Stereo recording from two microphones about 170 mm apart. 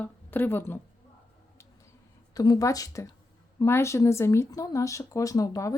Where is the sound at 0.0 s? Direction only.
10° left (ahead or behind).